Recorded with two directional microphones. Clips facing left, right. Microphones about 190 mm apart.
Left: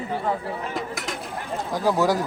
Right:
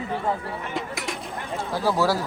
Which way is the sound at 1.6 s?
15° left (ahead or behind).